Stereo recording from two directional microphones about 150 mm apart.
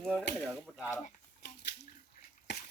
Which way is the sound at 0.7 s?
5° right (ahead or behind).